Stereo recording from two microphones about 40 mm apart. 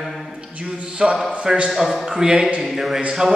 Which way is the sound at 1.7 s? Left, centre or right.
Centre.